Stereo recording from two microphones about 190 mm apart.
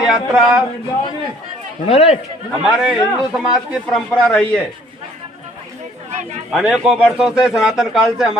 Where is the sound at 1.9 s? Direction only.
30° left (ahead or behind).